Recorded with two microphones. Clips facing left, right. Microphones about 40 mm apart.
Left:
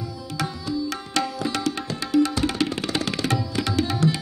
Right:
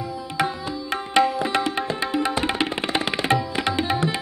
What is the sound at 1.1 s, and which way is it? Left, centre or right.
Music, right.